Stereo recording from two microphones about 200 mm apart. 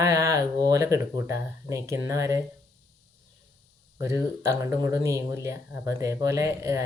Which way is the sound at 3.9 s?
15° right (ahead or behind).